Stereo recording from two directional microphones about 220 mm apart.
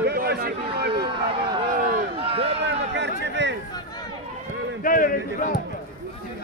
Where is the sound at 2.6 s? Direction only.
55° right (ahead or behind).